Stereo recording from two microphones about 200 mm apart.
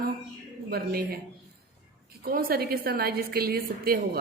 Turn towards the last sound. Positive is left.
turn(degrees=-50)  # may be behind; listen again after turning